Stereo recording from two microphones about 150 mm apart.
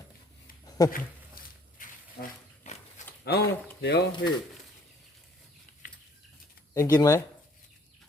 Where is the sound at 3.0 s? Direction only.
55° left (ahead or behind).